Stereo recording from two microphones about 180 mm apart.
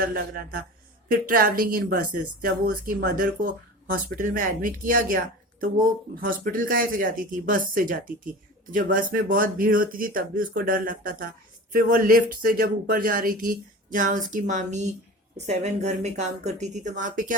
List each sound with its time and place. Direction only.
0.0 s speech: 55° right (ahead or behind)